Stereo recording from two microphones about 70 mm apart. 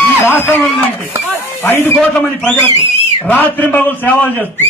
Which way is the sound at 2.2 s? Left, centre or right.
Left.